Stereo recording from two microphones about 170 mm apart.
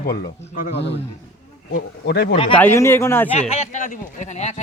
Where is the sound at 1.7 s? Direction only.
65° left (ahead or behind).